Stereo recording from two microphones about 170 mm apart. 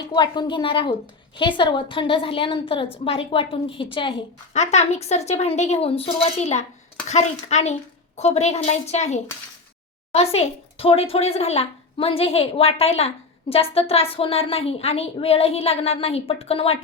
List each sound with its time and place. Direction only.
0.1 s a woman's voice: 25° left (ahead or behind)
4.5 s speech: 40° left (ahead or behind)